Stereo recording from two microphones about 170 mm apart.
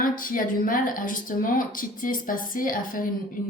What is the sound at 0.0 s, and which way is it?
Speech, 55° left (ahead or behind).